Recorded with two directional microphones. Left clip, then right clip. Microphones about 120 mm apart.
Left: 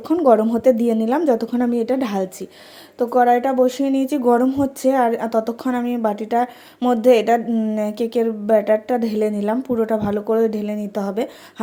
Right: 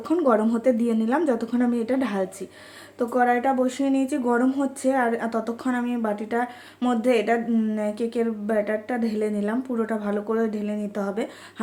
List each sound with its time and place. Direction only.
0.0 s speech: 30° left (ahead or behind)
7.5 s speech: 25° left (ahead or behind)
7.9 s speech: 40° left (ahead or behind)